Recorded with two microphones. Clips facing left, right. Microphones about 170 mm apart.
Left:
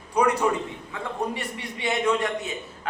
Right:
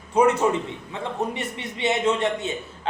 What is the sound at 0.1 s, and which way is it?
A man's voice, 25° right (ahead or behind).